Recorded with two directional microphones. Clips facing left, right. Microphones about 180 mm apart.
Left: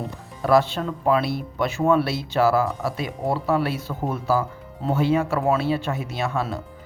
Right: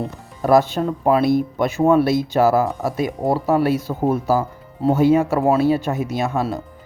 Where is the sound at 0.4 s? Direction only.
45° right (ahead or behind).